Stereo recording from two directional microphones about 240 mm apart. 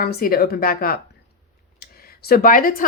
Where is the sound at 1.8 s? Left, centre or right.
Left.